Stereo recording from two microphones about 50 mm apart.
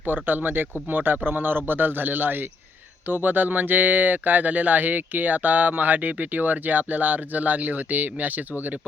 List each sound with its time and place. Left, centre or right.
0.0 s speech: right